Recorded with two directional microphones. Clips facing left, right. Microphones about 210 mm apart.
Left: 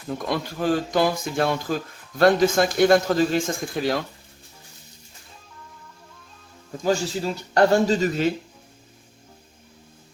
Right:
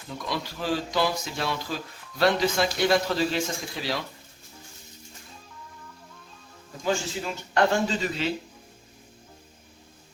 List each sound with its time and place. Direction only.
0.1 s speech: 50° left (ahead or behind)
6.8 s speech: 40° left (ahead or behind)